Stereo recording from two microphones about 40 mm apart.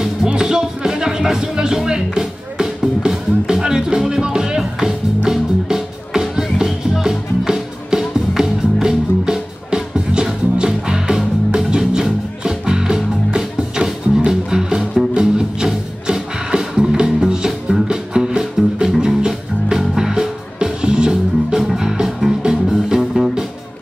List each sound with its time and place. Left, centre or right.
0.4 s music: centre